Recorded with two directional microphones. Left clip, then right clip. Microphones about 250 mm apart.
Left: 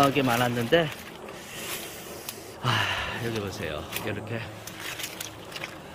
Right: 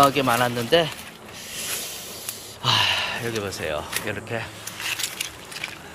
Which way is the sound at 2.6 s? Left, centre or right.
Centre.